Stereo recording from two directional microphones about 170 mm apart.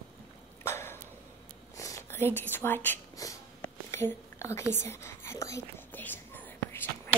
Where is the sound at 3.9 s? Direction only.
15° left (ahead or behind).